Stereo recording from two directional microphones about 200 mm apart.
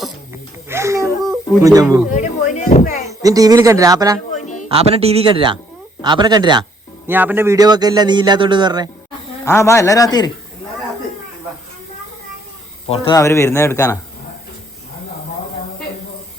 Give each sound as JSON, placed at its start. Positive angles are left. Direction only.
{"t": 0.7, "sound": "a sound", "side_deg": -15}
{"t": 1.6, "sound": "speech", "side_deg": -20}
{"t": 2.0, "sound": "speech", "side_deg": 40}
{"t": 3.1, "sound": "speech", "side_deg": -15}
{"t": 4.7, "sound": "a man's voice", "side_deg": -30}
{"t": 7.1, "sound": "a man's voice", "side_deg": -10}
{"t": 9.4, "sound": "a man's voice", "side_deg": 15}
{"t": 12.9, "sound": "a man's voice", "side_deg": 20}